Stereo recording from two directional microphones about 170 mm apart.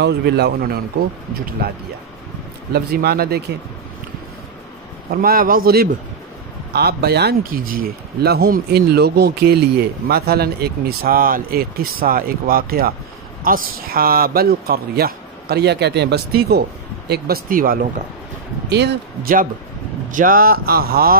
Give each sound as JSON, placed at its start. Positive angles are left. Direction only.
{"t": 0.0, "sound": "speech", "side_deg": -75}
{"t": 5.1, "sound": "speech", "side_deg": -60}
{"t": 17.1, "sound": "speech", "side_deg": -60}
{"t": 18.7, "sound": "speech", "side_deg": -80}
{"t": 20.1, "sound": "speech", "side_deg": -50}